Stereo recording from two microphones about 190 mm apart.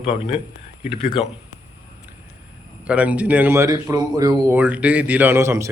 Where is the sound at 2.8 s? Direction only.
5° right (ahead or behind).